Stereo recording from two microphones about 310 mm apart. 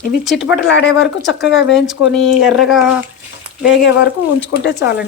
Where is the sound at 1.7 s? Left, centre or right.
Centre.